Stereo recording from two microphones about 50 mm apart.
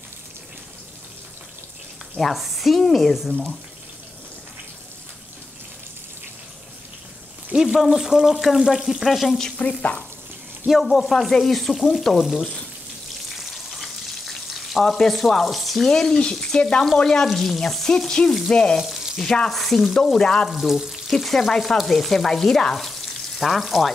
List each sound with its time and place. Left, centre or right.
2.1 s stir: centre
7.5 s speech: centre
7.8 s stir: centre
9.6 s frying: left
10.7 s stir: centre
13.4 s frying: centre
15.9 s frying: centre
18.8 s frying: centre
19.5 s stir: centre
20.4 s frying: centre
21.1 s stir: centre